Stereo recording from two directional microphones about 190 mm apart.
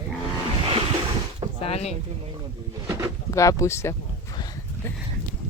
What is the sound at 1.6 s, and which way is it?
Speech, 35° left (ahead or behind).